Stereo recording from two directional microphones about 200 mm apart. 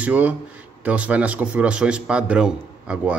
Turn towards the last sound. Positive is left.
turn(degrees=-5)  # may be behind; listen again after turning